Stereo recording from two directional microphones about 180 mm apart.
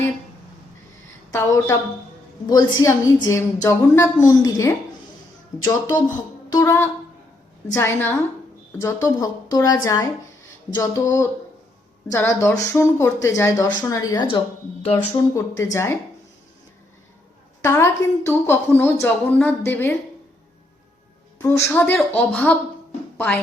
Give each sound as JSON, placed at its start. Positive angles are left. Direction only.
{"t": 1.3, "sound": "a woman's voice", "side_deg": 15}
{"t": 6.5, "sound": "a woman's voice", "side_deg": 15}
{"t": 14.3, "sound": "speech", "side_deg": 30}
{"t": 15.4, "sound": "a woman's voice", "side_deg": 15}
{"t": 17.6, "sound": "a woman's voice", "side_deg": 15}
{"t": 21.3, "sound": "a woman's voice", "side_deg": 10}